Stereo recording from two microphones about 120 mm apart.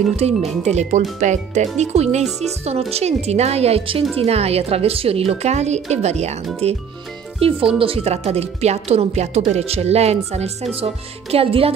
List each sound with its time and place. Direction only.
0.1 s a woman's voice: 65° right (ahead or behind)
1.2 s a woman's voice: 80° right; by 11.7 s 55° right (ahead or behind)